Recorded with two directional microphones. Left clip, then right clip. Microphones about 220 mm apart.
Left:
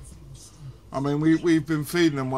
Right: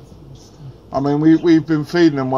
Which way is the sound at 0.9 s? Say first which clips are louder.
Right 9 dB; 35° left (ahead or behind).